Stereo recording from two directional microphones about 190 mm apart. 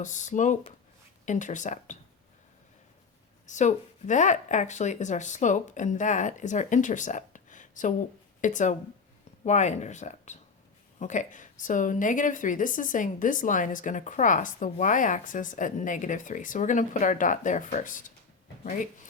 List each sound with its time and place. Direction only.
0.0 s speech: 40° left (ahead or behind)
3.4 s a woman's voice: 40° left (ahead or behind)